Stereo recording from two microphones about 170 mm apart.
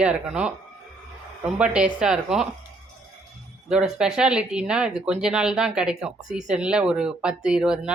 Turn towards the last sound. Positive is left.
turn(degrees=-5)  # may be behind; listen again after turning